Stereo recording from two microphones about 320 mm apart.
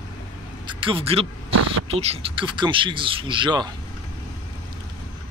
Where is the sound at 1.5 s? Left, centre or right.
Right.